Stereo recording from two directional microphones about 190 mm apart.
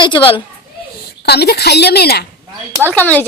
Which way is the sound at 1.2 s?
60° left (ahead or behind).